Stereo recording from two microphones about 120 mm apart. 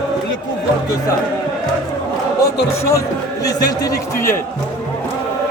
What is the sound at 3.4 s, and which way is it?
Speech, 30° left (ahead or behind).